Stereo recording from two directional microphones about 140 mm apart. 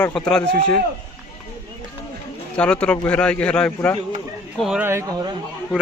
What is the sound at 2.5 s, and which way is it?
A man's voice, 10° left (ahead or behind).